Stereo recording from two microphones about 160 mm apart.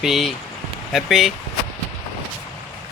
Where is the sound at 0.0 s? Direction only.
Centre (ahead or behind).